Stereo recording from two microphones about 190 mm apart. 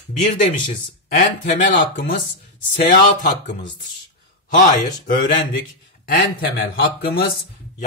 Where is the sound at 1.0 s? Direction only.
45° left (ahead or behind).